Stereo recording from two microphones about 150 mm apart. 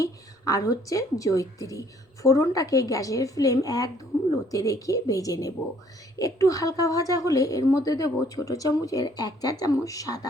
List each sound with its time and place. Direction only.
0.0 s a woman's voice: 25° left (ahead or behind)